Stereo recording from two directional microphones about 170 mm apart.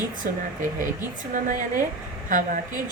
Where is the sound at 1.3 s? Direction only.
55° right (ahead or behind).